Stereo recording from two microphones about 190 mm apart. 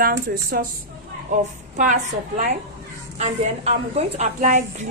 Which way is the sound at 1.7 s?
40° right (ahead or behind).